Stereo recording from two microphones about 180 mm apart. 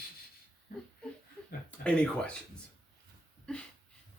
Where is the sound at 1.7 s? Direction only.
5° left (ahead or behind).